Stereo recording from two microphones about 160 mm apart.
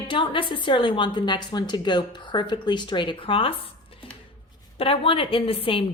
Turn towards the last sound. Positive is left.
turn(degrees=35)  # may be behind; listen again after turning